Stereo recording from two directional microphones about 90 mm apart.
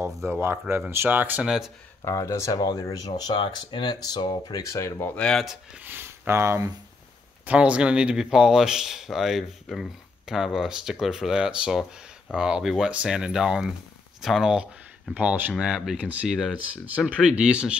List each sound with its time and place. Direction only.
0.3 s speech: 25° right (ahead or behind)
2.0 s speech: 35° left (ahead or behind)
2.5 s speech: 50° left (ahead or behind)
4.6 s speech: 35° left (ahead or behind)
5.1 s speech: 10° left (ahead or behind)
5.8 s speech: 20° right (ahead or behind)
7.4 s speech: 15° right (ahead or behind)
15.1 s speech: 20° right (ahead or behind)
15.6 s speech: 5° right (ahead or behind)